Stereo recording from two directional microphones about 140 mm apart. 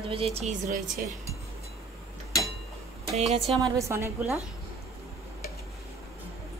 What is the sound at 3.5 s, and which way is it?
Speech, 25° right (ahead or behind).